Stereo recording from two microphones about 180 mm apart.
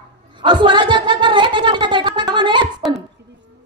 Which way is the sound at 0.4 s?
25° right (ahead or behind).